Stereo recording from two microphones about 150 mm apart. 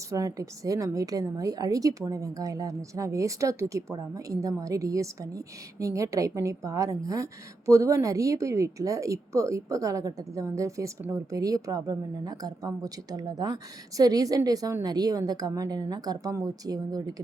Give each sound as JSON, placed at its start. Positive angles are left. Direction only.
{"t": 0.1, "sound": "a woman's voice", "side_deg": -20}